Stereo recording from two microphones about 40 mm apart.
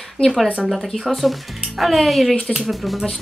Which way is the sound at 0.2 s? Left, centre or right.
Left.